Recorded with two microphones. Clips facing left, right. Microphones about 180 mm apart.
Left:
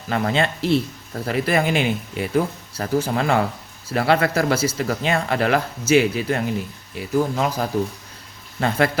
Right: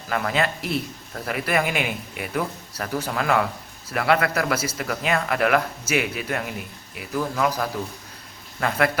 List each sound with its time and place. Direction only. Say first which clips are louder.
0.1 s speech: left 3 dB; 30° left (ahead or behind)